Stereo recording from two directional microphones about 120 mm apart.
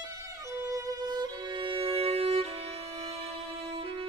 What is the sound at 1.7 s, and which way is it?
Music, 50° right (ahead or behind).